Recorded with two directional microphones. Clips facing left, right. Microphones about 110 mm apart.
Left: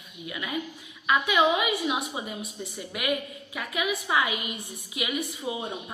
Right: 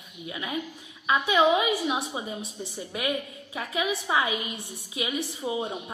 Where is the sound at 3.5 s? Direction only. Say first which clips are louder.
Right 1 dB; 30° right (ahead or behind).